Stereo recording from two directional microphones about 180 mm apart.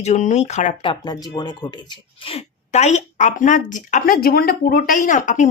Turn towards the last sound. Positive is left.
turn(degrees=45)  # may be behind; listen again after turning